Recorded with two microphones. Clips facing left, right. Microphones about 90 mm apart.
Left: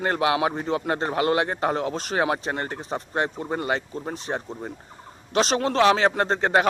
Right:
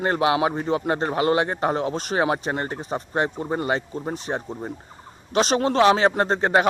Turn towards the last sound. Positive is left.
turn(degrees=-5)  # may be behind; listen again after turning